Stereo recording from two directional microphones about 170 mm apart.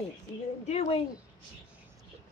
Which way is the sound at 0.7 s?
40° left (ahead or behind).